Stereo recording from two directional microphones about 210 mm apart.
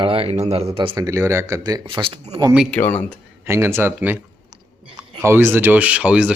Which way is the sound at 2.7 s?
10° left (ahead or behind).